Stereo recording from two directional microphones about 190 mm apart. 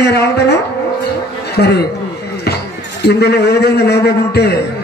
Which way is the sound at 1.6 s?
55° left (ahead or behind).